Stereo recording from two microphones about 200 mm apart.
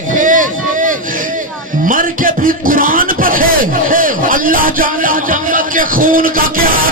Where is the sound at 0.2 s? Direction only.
40° right (ahead or behind).